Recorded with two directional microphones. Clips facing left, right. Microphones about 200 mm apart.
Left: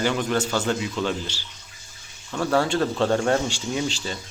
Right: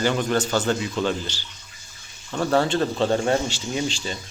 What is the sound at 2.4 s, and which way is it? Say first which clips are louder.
A man's voice: right 1 dB; 15° right (ahead or behind).